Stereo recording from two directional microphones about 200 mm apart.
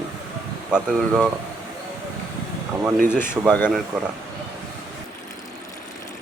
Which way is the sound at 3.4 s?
15° right (ahead or behind).